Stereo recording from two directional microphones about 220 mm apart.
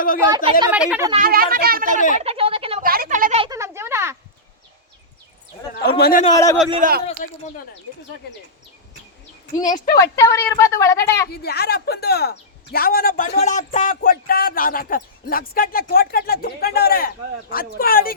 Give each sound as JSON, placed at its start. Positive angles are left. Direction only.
{"t": 0.3, "sound": "a woman's voice", "side_deg": -20}
{"t": 0.7, "sound": "speech", "side_deg": -5}
{"t": 1.2, "sound": "speech", "side_deg": -40}
{"t": 2.1, "sound": "speech", "side_deg": -25}
{"t": 2.8, "sound": "a sound", "side_deg": -40}
{"t": 3.4, "sound": "a sound", "side_deg": -15}
{"t": 6.0, "sound": "speech", "side_deg": 40}
{"t": 6.3, "sound": "a woman's voice", "side_deg": 15}
{"t": 6.8, "sound": "speech", "side_deg": -35}
{"t": 7.2, "sound": "speech", "side_deg": 35}
{"t": 9.6, "sound": "a woman's voice", "side_deg": 15}
{"t": 11.3, "sound": "speech", "side_deg": 45}